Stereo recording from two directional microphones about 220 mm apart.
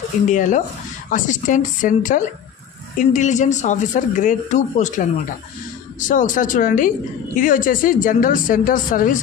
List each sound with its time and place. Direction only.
0.3 s speech: 35° left (ahead or behind)